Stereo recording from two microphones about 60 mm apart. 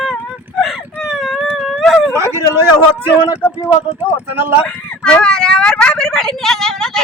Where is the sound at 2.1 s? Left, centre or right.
Right.